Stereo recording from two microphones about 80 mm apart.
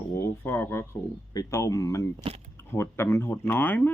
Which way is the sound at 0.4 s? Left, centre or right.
Left.